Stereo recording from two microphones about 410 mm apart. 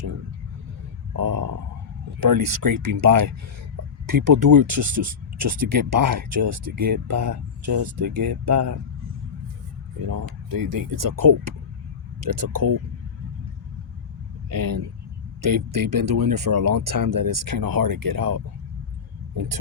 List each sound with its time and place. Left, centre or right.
1.3 s a sound: right
2.2 s speech: right
7.6 s speech: right
8.2 s speech: right
10.1 s speech: right
14.5 s speech: right